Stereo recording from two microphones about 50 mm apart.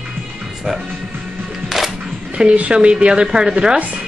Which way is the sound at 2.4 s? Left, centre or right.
Centre.